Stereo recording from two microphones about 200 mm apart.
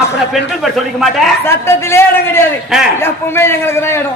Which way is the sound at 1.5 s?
10° left (ahead or behind).